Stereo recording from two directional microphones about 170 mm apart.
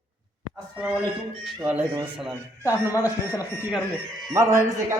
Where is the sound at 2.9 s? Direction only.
20° left (ahead or behind).